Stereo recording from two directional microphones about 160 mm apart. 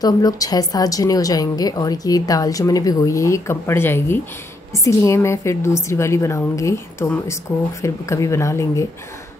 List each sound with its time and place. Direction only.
0.0 s a woman's voice: 25° left (ahead or behind)